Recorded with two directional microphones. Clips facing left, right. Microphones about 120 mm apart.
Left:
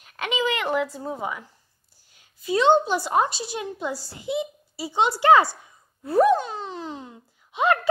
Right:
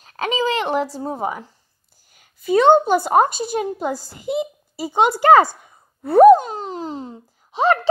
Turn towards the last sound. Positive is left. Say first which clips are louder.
# right 4 dB
turn(degrees=-30)  # may be behind; listen again after turning